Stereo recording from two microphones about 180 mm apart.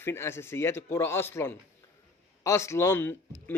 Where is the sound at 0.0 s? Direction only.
15° left (ahead or behind).